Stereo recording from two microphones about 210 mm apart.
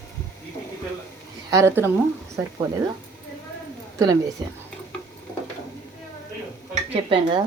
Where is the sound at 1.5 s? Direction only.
15° right (ahead or behind).